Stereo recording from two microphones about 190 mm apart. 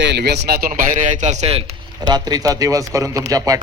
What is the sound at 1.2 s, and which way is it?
A man's voice, 35° right (ahead or behind).